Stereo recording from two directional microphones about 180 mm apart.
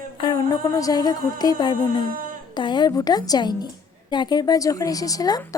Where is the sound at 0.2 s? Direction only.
25° left (ahead or behind).